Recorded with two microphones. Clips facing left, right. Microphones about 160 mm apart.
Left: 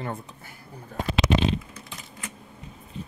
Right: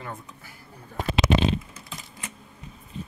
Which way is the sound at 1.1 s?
45° right (ahead or behind).